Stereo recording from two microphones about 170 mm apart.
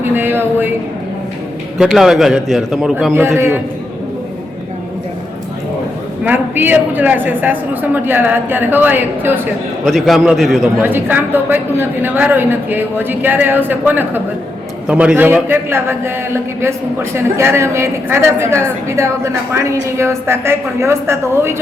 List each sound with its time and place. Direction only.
0.2 s a woman's voice: 10° right (ahead or behind)
1.8 s a man's voice: centre (ahead or behind)
2.9 s a woman's voice: 10° right (ahead or behind)
6.2 s a woman's voice: 10° right (ahead or behind)
9.8 s a man's voice: centre (ahead or behind)
10.8 s a woman's voice: 10° right (ahead or behind)